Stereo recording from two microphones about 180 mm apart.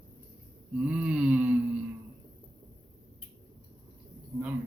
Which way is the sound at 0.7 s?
5° right (ahead or behind).